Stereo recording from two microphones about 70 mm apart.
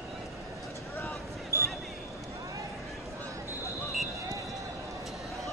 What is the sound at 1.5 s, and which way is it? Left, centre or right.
Basketball bounce, right.